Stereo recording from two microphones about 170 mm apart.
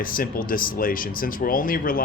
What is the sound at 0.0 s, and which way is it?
Speech, 55° left (ahead or behind).